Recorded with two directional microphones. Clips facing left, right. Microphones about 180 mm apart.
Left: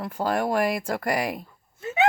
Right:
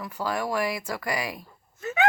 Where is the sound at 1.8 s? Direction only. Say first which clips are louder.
Left 2 dB; 25° left (ahead or behind).